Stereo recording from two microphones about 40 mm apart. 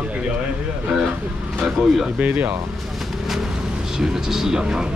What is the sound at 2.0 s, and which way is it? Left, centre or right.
Speech, right.